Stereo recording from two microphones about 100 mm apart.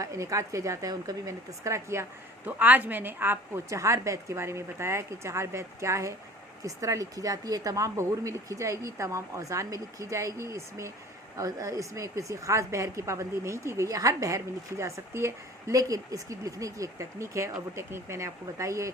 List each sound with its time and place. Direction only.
0.0 s a woman's voice: 30° right (ahead or behind)
2.5 s a woman's voice: 15° right (ahead or behind)